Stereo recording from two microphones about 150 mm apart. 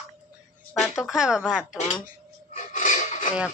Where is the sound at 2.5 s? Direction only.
55° left (ahead or behind).